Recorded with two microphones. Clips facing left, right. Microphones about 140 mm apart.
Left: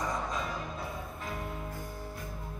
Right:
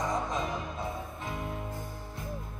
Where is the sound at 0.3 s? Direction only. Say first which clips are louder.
Right 3 dB; 20° right (ahead or behind).